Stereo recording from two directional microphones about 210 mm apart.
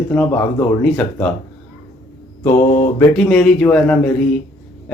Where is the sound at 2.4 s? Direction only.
20° left (ahead or behind).